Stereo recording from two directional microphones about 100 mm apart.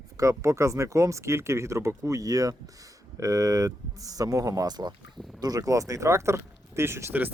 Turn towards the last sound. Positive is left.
turn(degrees=-20)  # may be behind; listen again after turning